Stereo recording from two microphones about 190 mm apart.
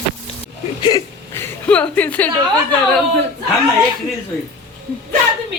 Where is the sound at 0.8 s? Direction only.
20° left (ahead or behind).